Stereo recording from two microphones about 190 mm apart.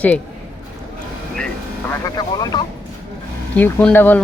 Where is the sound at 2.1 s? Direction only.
20° left (ahead or behind).